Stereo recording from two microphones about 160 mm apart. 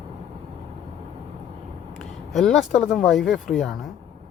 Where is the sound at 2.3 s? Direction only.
Centre (ahead or behind).